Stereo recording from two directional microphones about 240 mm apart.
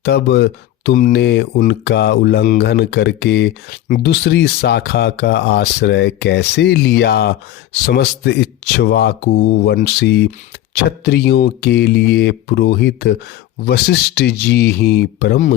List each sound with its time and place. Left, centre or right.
0.0 s speech: left